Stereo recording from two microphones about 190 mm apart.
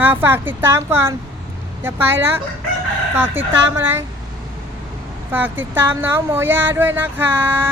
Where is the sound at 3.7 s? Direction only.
15° right (ahead or behind).